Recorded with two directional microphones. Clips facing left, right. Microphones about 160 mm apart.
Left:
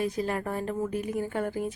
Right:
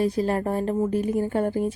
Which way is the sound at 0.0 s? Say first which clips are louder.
Right 6 dB; 35° right (ahead or behind).